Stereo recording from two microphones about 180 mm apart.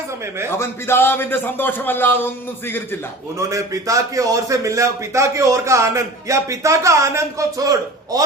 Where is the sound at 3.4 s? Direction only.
15° right (ahead or behind).